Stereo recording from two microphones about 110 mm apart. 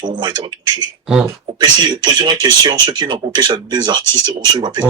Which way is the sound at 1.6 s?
40° right (ahead or behind).